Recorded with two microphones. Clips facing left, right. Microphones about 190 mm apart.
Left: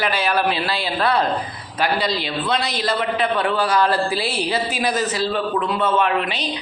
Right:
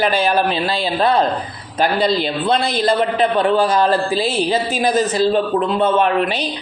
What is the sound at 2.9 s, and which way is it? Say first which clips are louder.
Speech: right 4 dB; 40° right (ahead or behind).